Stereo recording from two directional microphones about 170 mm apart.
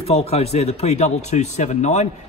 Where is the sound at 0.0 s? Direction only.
35° left (ahead or behind).